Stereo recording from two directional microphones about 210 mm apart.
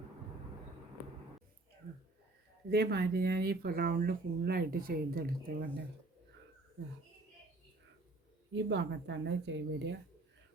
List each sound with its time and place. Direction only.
2.6 s speech: 50° right (ahead or behind)
8.5 s speech: 55° right (ahead or behind)